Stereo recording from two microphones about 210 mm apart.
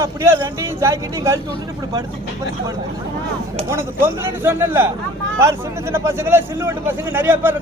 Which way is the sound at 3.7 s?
10° right (ahead or behind).